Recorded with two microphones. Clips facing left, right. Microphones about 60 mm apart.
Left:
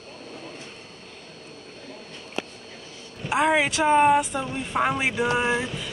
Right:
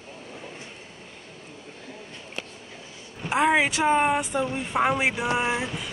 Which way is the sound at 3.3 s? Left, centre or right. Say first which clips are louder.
Even; centre.